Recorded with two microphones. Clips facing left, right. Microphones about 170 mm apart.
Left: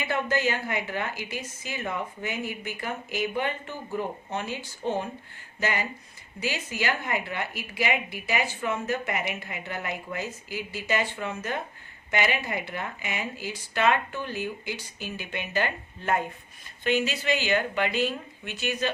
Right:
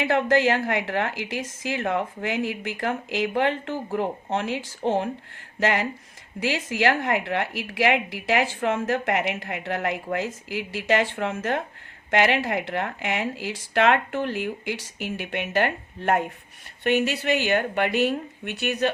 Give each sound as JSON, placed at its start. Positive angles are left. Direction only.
{"t": 0.0, "sound": "a woman's voice", "side_deg": -85}